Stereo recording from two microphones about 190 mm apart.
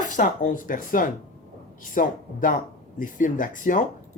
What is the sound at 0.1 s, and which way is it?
A woman's voice, 45° left (ahead or behind).